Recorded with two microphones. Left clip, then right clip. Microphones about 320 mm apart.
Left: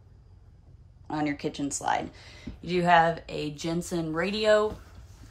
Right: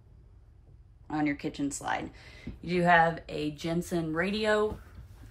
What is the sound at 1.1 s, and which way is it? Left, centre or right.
A woman's voice, centre.